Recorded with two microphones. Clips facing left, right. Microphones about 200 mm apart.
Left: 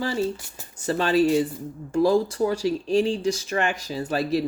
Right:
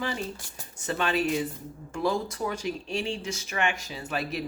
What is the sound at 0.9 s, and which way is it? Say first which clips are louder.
Speech: left 7 dB; 35° left (ahead or behind).